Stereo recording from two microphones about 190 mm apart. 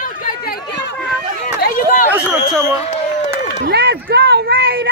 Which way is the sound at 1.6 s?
45° left (ahead or behind).